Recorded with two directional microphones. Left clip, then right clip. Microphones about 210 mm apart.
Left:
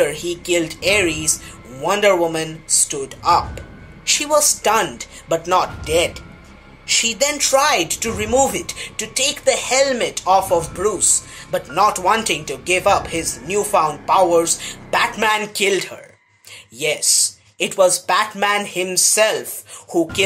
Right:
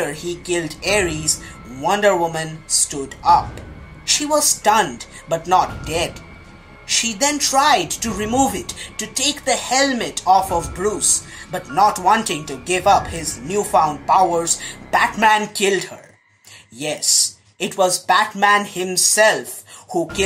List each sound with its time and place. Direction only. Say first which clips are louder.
0.0 s speech: left 5 dB; 30° left (ahead or behind)
7.1 s speech: left 3 dB; 25° left (ahead or behind)